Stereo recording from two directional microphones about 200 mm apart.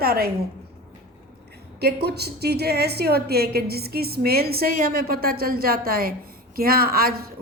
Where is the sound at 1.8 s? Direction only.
55° right (ahead or behind).